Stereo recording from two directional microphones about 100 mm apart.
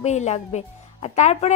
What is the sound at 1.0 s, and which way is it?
Speech, 90° left.